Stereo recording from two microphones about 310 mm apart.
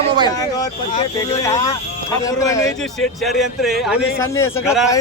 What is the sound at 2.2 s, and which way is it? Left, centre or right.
Speech, centre.